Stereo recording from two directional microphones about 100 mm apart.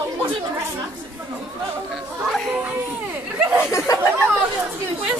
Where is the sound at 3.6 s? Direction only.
30° left (ahead or behind).